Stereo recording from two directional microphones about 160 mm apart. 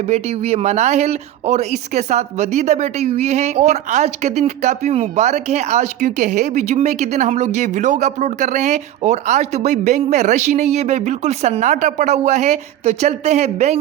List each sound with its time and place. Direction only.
0.1 s speech: 40° right (ahead or behind)